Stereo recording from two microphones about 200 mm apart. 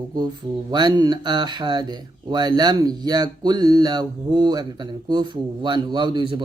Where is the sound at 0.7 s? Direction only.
20° right (ahead or behind).